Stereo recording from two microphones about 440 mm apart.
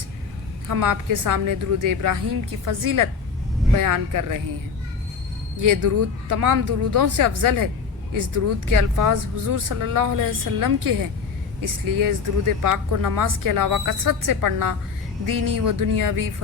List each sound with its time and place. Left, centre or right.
0.7 s speech: right
5.6 s speech: right